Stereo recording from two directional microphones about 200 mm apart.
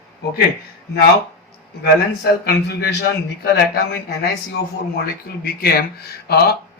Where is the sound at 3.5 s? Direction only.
50° left (ahead or behind).